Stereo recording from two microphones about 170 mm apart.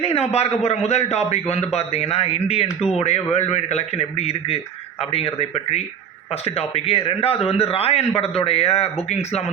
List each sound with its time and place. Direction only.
0.0 s a man's voice: 35° left (ahead or behind)